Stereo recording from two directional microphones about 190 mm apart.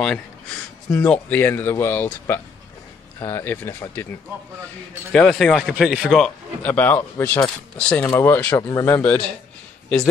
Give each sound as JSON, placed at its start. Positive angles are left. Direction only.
{"t": 0.9, "sound": "speech", "side_deg": 5}
{"t": 5.1, "sound": "speech", "side_deg": 5}